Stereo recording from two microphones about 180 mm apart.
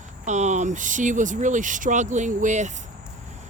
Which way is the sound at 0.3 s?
40° right (ahead or behind).